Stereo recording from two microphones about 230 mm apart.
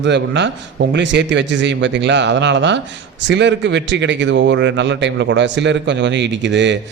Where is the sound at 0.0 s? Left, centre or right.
Right.